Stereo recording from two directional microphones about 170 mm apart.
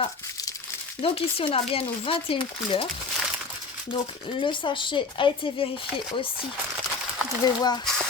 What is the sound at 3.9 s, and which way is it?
Speech, 30° left (ahead or behind).